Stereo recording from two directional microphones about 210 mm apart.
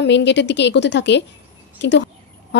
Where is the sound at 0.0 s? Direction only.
55° left (ahead or behind).